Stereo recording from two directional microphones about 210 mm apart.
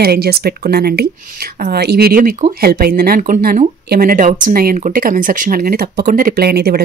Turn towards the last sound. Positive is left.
turn(degrees=-50)  # may be behind; listen again after turning